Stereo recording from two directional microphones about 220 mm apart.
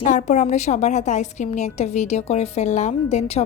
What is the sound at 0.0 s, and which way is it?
A woman's voice, 30° left (ahead or behind).